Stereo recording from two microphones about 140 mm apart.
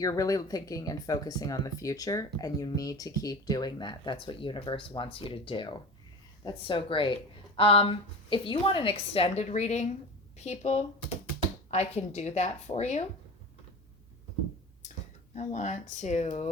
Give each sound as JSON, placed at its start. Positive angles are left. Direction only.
{"t": 0.0, "sound": "a woman's voice", "side_deg": 25}
{"t": 15.4, "sound": "speech", "side_deg": 55}